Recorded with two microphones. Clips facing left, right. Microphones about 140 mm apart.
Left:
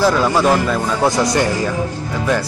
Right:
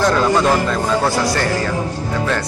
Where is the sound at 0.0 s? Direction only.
5° left (ahead or behind).